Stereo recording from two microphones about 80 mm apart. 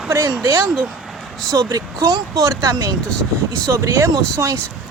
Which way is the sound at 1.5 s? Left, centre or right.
Right.